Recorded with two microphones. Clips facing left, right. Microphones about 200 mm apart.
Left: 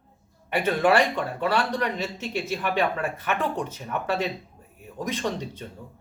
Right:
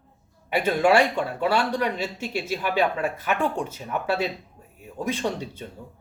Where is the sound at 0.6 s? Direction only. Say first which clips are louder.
Right 2 dB; 10° right (ahead or behind).